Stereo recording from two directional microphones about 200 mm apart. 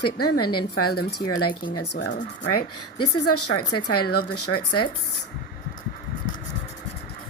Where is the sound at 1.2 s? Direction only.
20° left (ahead or behind).